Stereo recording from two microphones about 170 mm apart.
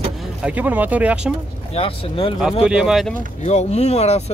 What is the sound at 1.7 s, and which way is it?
Speech, 35° left (ahead or behind).